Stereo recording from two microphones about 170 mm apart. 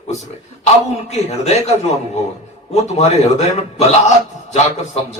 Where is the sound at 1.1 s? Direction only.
40° left (ahead or behind).